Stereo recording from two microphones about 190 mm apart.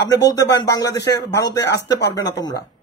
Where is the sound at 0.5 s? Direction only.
20° left (ahead or behind).